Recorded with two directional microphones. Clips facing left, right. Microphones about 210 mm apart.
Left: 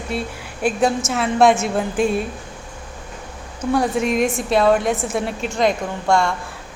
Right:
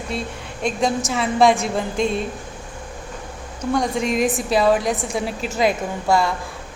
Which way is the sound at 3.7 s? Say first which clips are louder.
Left 2 dB; 5° left (ahead or behind).